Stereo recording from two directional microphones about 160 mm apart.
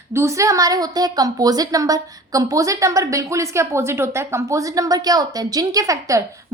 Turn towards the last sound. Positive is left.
turn(degrees=-20)  # may be behind; listen again after turning